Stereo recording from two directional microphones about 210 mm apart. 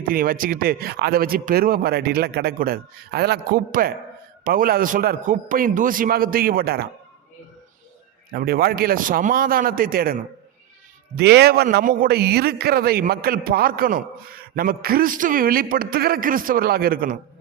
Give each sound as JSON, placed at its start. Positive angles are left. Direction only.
{"t": 0.1, "sound": "speech", "side_deg": -45}
{"t": 8.3, "sound": "speech", "side_deg": -45}
{"t": 11.2, "sound": "speech", "side_deg": -50}